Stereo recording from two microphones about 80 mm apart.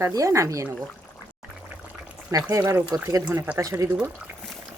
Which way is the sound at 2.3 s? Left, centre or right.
Right.